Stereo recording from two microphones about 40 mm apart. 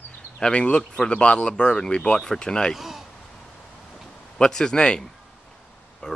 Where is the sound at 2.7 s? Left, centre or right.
Centre.